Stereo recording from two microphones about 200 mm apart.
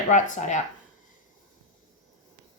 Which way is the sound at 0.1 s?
35° left (ahead or behind).